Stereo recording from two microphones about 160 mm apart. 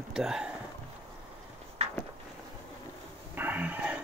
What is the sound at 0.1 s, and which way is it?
Speech, 5° right (ahead or behind).